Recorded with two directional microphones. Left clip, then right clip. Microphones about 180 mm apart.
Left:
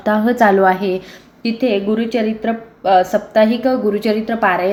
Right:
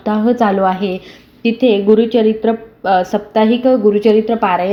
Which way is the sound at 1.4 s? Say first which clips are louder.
Right 6 dB; 40° right (ahead or behind).